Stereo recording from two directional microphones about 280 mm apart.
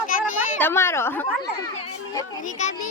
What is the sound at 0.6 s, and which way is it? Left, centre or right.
Speech, centre.